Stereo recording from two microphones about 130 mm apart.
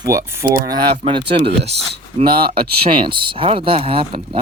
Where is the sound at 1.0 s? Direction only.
45° right (ahead or behind).